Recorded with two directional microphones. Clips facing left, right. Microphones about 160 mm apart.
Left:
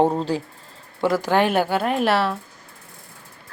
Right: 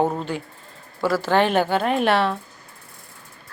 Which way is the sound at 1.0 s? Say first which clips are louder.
Even; 15° left (ahead or behind).